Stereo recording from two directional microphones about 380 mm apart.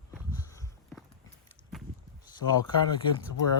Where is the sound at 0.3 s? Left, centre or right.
Centre.